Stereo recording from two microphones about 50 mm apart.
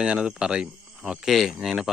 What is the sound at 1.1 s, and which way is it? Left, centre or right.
Speech, centre.